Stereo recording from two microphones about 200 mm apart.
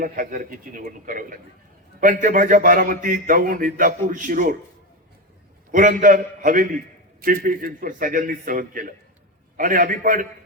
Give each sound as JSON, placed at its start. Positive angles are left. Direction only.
{"t": 0.0, "sound": "a man's voice", "side_deg": -40}
{"t": 5.7, "sound": "a man's voice", "side_deg": -40}